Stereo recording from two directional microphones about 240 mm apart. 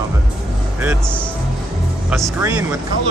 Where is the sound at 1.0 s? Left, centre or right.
Centre.